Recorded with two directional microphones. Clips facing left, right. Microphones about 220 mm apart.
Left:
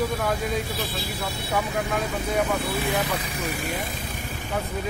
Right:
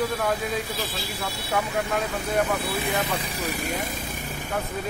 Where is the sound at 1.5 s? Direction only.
Centre (ahead or behind).